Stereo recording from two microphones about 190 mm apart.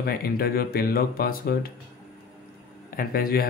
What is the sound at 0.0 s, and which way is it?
Speech, 50° left (ahead or behind).